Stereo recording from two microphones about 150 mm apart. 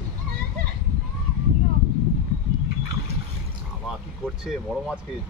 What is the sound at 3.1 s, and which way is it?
Trickle, 45° right (ahead or behind).